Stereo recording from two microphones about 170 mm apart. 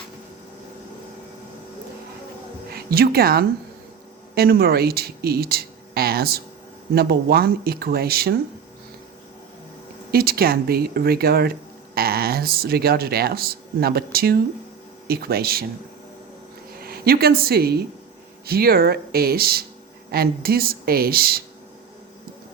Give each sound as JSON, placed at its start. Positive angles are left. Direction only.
{"t": 2.6, "sound": "a woman's voice", "side_deg": -65}
{"t": 10.1, "sound": "speech", "side_deg": -65}
{"t": 16.7, "sound": "speech", "side_deg": -65}